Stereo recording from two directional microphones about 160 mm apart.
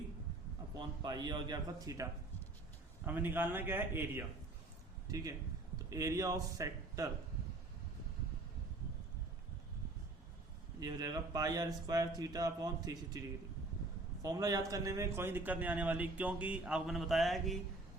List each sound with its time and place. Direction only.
0.8 s speech: 25° right (ahead or behind)
3.1 s a man's voice: 10° right (ahead or behind)
10.8 s speech: 25° right (ahead or behind)
14.2 s a man's voice: 20° right (ahead or behind); by 17.6 s centre (ahead or behind)